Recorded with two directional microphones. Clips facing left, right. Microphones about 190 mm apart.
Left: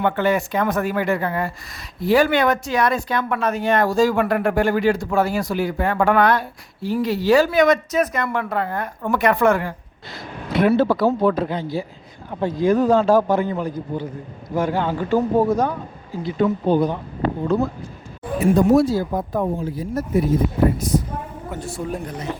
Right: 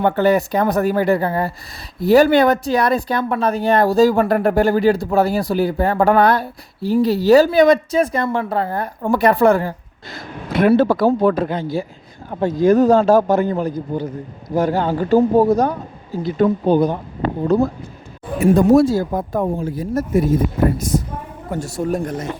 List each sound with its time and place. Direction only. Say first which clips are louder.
0.0 s speech: right 4 dB; 35° right (ahead or behind)
10.5 s speech: right 3 dB; 50° right (ahead or behind)
18.5 s speech: right 3 dB; 50° right (ahead or behind)